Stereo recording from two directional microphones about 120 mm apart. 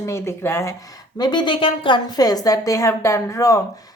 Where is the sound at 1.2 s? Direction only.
40° left (ahead or behind).